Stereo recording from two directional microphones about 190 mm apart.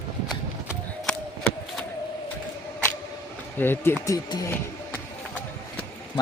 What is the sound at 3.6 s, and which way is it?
Speech, 10° left (ahead or behind).